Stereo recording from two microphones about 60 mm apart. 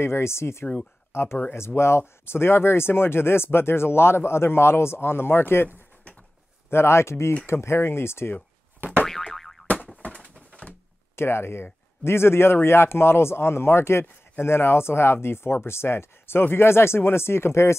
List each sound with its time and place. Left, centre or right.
0.0 s speech: left
6.7 s speech: left
9.0 s boing: centre
10.0 s bird: left
11.1 s speech: left